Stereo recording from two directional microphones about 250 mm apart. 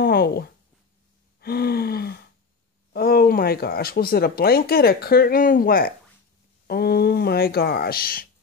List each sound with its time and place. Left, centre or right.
0.0 s a sound: left
1.4 s gasp: left
2.9 s speech: left